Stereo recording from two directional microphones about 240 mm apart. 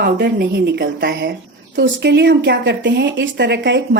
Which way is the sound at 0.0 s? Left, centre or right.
Right.